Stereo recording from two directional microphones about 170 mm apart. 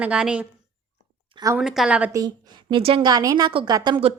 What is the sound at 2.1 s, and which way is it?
A woman's voice, 25° right (ahead or behind).